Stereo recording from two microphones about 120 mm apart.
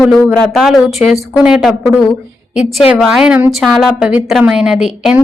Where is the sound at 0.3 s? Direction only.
5° left (ahead or behind).